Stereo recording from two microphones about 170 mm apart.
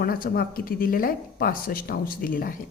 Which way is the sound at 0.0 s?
60° left (ahead or behind).